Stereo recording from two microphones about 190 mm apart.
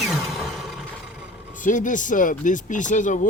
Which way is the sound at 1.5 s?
45° left (ahead or behind).